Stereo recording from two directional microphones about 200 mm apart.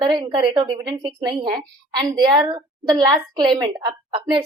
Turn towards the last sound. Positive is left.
turn(degrees=-25)  # may be behind; listen again after turning